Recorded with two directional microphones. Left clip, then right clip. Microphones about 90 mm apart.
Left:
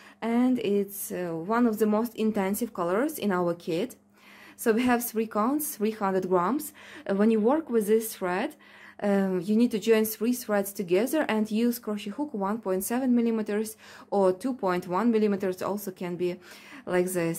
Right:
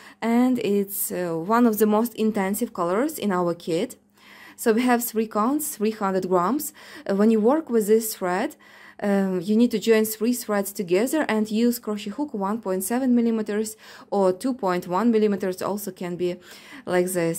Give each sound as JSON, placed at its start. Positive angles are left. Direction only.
{"t": 0.2, "sound": "speech", "side_deg": -55}
{"t": 2.1, "sound": "speech", "side_deg": -35}